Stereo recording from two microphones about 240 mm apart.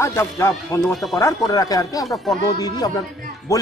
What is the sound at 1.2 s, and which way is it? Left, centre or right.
Speech, centre.